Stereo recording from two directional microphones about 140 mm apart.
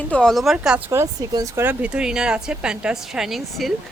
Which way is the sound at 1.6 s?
10° right (ahead or behind).